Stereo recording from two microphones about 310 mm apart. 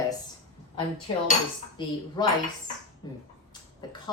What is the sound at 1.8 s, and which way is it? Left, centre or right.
Speech, centre.